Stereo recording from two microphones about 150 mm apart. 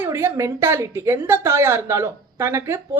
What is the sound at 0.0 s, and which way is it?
A woman's voice, 15° right (ahead or behind).